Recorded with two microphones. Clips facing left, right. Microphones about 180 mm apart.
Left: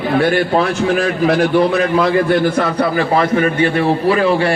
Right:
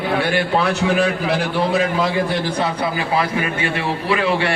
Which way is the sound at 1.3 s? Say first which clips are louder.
Left 6 dB; 55° left (ahead or behind).